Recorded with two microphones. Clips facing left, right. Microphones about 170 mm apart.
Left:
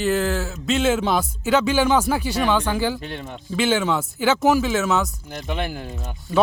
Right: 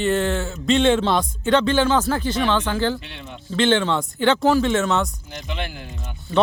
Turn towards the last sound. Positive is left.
turn(degrees=45)  # may be behind; listen again after turning